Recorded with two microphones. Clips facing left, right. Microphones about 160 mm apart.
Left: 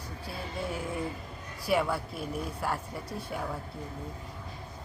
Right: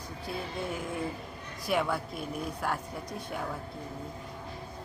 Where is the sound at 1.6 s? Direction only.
5° left (ahead or behind).